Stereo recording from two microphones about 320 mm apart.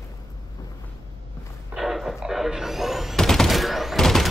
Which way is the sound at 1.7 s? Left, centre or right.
Centre.